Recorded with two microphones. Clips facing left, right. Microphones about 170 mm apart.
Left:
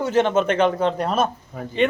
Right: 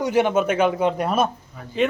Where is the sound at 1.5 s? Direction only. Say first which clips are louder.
Left 8 dB; 50° left (ahead or behind).